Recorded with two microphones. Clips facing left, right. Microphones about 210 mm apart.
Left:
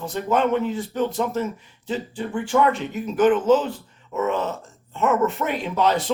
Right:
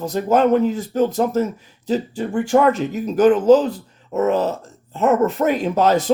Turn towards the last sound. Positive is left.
turn(degrees=-45)  # may be behind; listen again after turning